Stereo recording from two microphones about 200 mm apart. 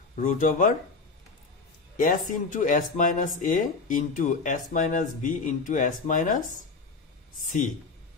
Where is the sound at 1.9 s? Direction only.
40° left (ahead or behind).